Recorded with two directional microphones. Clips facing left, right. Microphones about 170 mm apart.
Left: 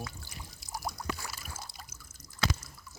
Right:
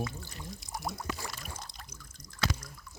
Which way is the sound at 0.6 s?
Centre (ahead or behind).